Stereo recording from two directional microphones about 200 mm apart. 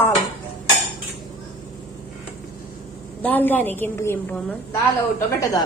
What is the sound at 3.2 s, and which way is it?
A woman's voice, 10° left (ahead or behind).